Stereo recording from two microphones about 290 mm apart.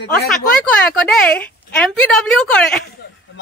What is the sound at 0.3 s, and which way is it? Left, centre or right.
A woman's voice, centre.